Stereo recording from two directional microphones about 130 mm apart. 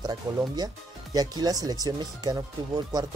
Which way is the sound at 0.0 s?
30° right (ahead or behind).